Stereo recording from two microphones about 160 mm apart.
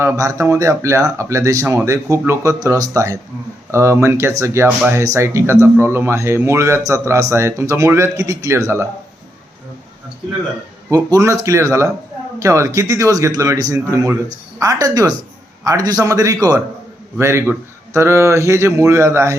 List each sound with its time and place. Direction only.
0.0 s speech: 15° right (ahead or behind)
10.8 s speech: 20° right (ahead or behind)